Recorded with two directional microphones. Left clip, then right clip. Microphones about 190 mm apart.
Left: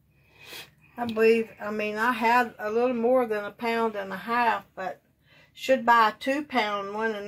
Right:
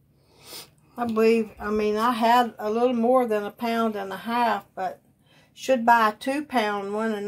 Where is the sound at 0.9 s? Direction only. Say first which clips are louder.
Right 1 dB; 30° right (ahead or behind).